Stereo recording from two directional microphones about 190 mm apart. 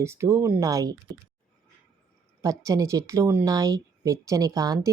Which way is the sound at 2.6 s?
15° right (ahead or behind).